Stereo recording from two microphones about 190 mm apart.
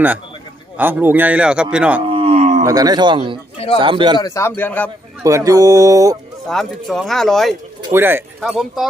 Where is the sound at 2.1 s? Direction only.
30° right (ahead or behind).